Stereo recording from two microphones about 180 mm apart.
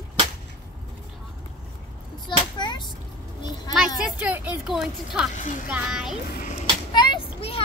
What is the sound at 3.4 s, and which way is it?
Children playing, 25° left (ahead or behind).